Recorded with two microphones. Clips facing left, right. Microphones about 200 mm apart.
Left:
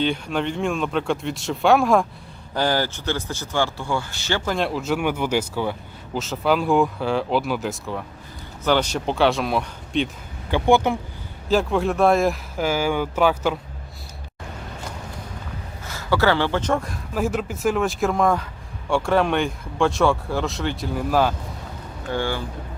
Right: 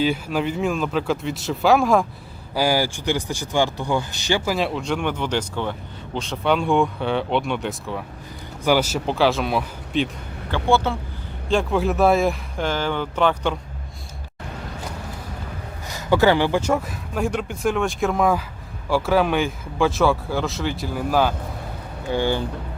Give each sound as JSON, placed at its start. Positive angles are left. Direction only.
{"t": 0.0, "sound": "speech", "side_deg": -5}
{"t": 10.5, "sound": "speech", "side_deg": 15}
{"t": 11.4, "sound": "speech", "side_deg": 0}
{"t": 15.9, "sound": "speech", "side_deg": -15}
{"t": 22.1, "sound": "speech", "side_deg": -20}